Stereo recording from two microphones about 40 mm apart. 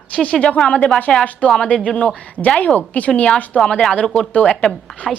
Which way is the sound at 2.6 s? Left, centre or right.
Left.